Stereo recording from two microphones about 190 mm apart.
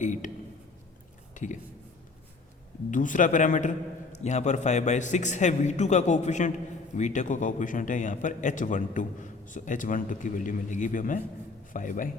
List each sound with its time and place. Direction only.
0.0 s a man's voice: 40° left (ahead or behind)
1.3 s a sound: 40° left (ahead or behind)
2.9 s a man's voice: 40° left (ahead or behind)